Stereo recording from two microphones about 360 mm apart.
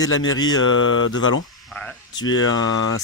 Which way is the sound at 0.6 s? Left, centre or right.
Left.